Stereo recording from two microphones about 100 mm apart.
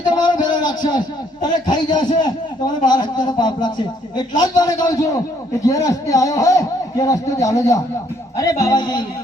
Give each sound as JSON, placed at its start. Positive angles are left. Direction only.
{"t": 0.2, "sound": "a man's voice", "side_deg": 45}